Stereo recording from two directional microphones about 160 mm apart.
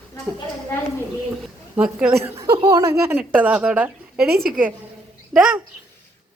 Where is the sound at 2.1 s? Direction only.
15° right (ahead or behind).